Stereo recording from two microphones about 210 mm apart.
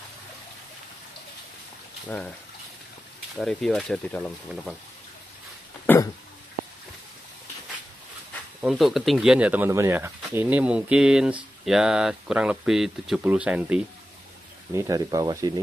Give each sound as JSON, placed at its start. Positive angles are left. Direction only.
{"t": 2.0, "sound": "speech", "side_deg": 5}
{"t": 3.3, "sound": "speech", "side_deg": 0}
{"t": 5.9, "sound": "throat clearing", "side_deg": 10}
{"t": 8.5, "sound": "speech", "side_deg": 0}